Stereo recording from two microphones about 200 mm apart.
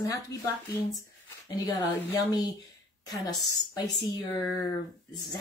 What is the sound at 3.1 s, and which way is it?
Speech, 20° left (ahead or behind).